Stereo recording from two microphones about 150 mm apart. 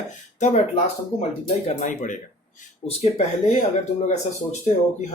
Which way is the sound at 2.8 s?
40° left (ahead or behind).